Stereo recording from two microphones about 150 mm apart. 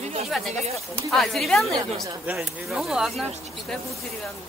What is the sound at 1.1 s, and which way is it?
Speech, centre (ahead or behind).